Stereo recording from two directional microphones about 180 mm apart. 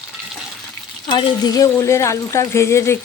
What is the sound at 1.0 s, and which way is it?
Speech, 25° left (ahead or behind).